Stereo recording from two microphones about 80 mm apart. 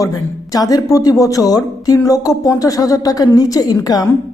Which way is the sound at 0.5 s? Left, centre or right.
Left.